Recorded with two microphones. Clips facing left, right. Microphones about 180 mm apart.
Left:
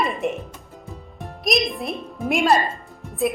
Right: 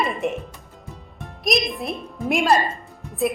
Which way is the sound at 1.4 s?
Centre (ahead or behind).